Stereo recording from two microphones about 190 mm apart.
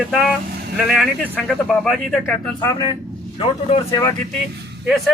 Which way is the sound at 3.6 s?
25° left (ahead or behind).